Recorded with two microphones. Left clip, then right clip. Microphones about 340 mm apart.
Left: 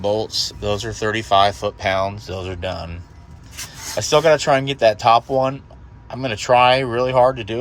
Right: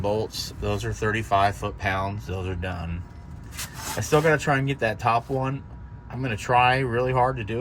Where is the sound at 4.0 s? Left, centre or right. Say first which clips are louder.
Left 7 dB; centre.